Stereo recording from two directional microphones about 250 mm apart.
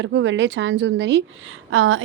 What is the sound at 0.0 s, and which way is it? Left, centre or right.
A woman's voice, right.